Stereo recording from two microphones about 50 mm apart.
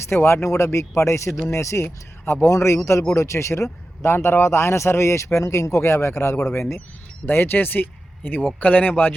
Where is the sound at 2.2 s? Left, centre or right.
Left.